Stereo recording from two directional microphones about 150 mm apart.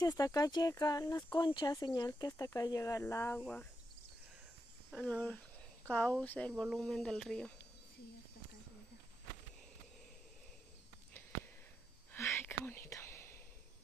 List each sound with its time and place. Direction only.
0.0 s speech: 25° left (ahead or behind)
5.0 s speech: 10° left (ahead or behind)
12.1 s whispering: 15° left (ahead or behind)